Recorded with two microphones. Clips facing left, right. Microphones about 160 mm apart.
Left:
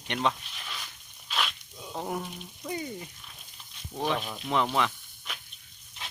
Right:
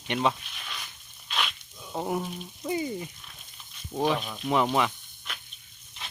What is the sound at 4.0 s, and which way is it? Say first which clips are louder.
Speech: right 3 dB; 5° right (ahead or behind).